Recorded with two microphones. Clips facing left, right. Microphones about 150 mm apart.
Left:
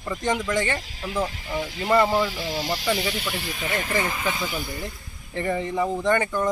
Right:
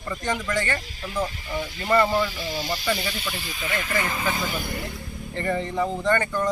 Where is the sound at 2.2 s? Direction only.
90° left.